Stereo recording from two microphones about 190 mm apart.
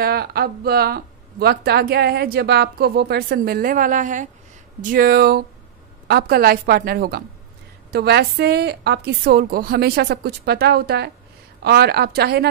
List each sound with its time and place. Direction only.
0.0 s a woman's voice: 55° right (ahead or behind)